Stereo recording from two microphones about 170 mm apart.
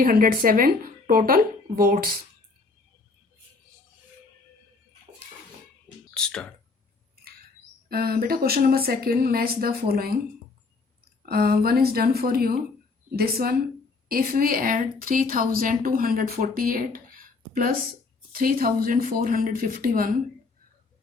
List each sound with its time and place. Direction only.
0.0 s speech: 60° right (ahead or behind)
6.1 s speech: 5° left (ahead or behind)
7.9 s speech: 60° right (ahead or behind)
11.3 s speech: 65° right (ahead or behind)